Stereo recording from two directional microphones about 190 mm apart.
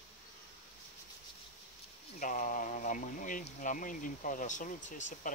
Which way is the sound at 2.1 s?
45° left (ahead or behind).